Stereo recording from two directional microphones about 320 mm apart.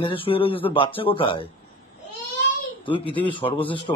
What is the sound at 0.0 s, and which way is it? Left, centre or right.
Speech, centre.